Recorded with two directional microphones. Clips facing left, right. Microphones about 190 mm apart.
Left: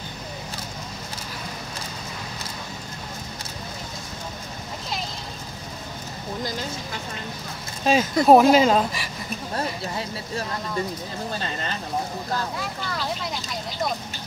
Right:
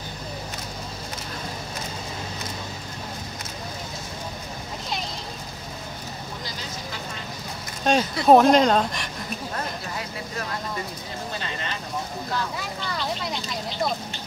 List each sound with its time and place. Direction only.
7.8 s speech: 5° left (ahead or behind)
9.6 s a sound: 30° left (ahead or behind)
12.5 s vehicle: centre (ahead or behind)